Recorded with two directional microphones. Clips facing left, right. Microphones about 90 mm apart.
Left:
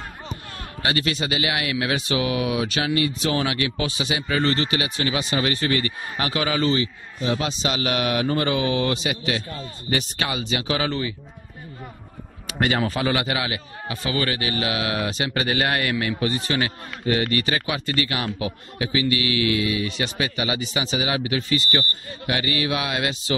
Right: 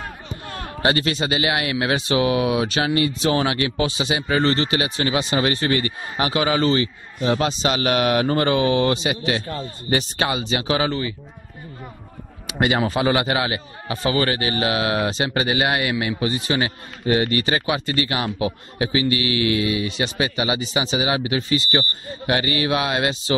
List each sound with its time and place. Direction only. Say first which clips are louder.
0.8 s speech: right 4 dB; 35° right (ahead or behind)
6.6 s a man's voice: right 2 dB; 55° right (ahead or behind); by 10.9 s 30° right (ahead or behind)
10.9 s speech: right 1 dB; centre (ahead or behind)
12.4 s speech: right 2 dB; 15° right (ahead or behind)
15.4 s a man's voice: right 1 dB; 15° right (ahead or behind)
22.2 s speech: right 3 dB; 35° right (ahead or behind)